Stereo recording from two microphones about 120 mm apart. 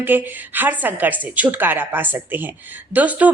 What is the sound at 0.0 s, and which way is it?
A man's voice, 15° right (ahead or behind).